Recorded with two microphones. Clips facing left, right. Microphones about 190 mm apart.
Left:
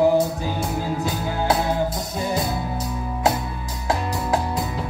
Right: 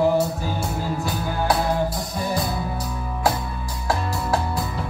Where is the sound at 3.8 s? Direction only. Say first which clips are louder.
Left 1 dB; 20° left (ahead or behind).